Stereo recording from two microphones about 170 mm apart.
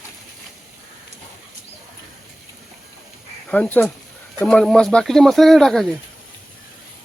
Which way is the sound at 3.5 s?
10° left (ahead or behind).